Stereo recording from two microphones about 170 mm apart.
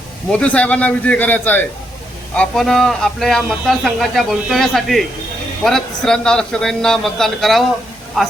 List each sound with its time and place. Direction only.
0.3 s a man's voice: 5° left (ahead or behind)